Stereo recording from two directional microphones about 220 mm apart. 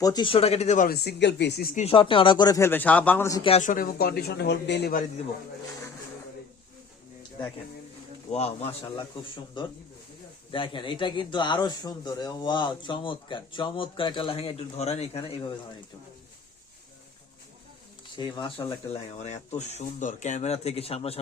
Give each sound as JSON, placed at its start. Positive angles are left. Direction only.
{"t": 0.0, "sound": "speech", "side_deg": 20}
{"t": 1.7, "sound": "a man's voice", "side_deg": 25}
{"t": 3.5, "sound": "a man's voice", "side_deg": 35}
{"t": 8.3, "sound": "speech", "side_deg": 30}
{"t": 18.2, "sound": "speech", "side_deg": 20}
{"t": 19.2, "sound": "speech", "side_deg": 30}